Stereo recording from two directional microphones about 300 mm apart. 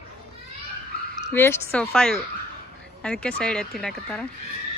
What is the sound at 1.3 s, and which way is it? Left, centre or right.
Speech, centre.